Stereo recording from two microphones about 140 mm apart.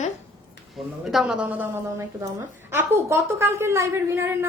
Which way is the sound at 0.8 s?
Centre (ahead or behind).